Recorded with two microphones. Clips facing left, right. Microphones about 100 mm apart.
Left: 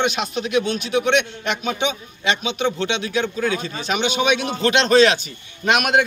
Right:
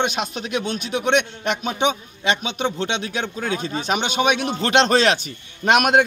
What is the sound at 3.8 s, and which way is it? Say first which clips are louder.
Speech: even; 50° right (ahead or behind).